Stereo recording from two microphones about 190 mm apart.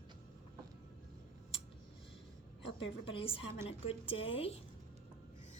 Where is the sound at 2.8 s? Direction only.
30° left (ahead or behind).